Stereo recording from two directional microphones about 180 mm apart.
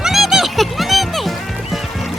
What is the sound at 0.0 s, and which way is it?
Music, centre (ahead or behind).